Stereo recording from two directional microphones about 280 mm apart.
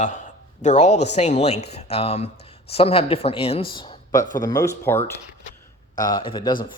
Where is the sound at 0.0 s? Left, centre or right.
Left.